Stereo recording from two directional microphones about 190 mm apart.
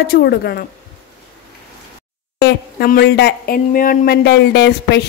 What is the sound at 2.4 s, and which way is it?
Speech, 55° left (ahead or behind).